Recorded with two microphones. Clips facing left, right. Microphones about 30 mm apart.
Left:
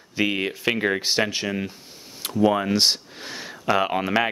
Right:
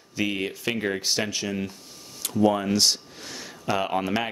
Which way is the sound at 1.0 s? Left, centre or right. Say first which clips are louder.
Left 4 dB; left.